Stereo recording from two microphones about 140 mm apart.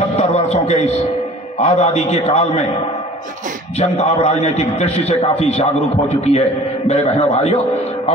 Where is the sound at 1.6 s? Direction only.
55° left (ahead or behind).